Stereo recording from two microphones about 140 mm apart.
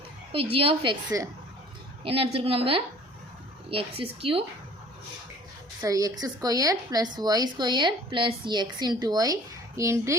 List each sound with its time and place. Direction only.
0.5 s a woman's voice: 40° right (ahead or behind)
2.0 s a woman's voice: 40° right (ahead or behind)
5.8 s speech: 25° right (ahead or behind)